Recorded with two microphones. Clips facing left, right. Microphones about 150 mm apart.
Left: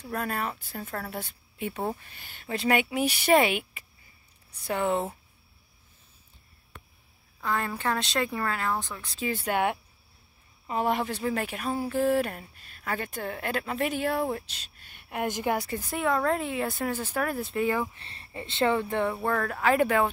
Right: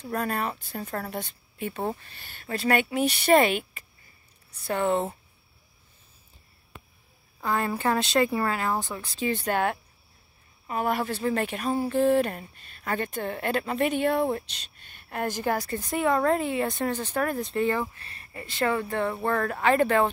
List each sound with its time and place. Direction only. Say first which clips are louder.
0.0 s speech: right 3 dB; 5° left (ahead or behind)
7.4 s a woman's voice: right 3 dB; 5° right (ahead or behind); by 15.6 s 20° left (ahead or behind)
15.6 s speech: right 3 dB; 5° left (ahead or behind)
17.9 s speech: left 2 dB; 25° left (ahead or behind)
19.1 s speech: right 2 dB; centre (ahead or behind)